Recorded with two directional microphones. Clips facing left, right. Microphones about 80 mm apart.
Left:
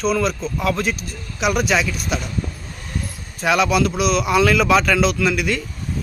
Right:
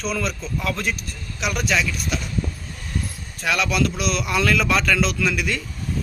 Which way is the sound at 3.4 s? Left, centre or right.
Centre.